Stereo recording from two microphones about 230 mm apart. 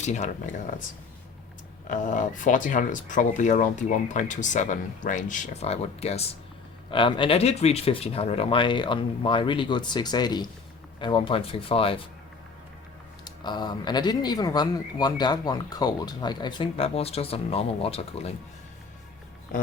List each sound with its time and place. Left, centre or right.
0.0 s speech: left
1.9 s speech: left
13.2 s speech: centre